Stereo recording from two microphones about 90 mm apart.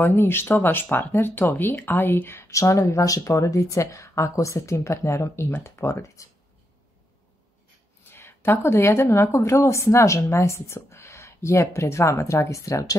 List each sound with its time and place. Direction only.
0.0 s speech: 25° left (ahead or behind)
8.1 s speech: 25° left (ahead or behind)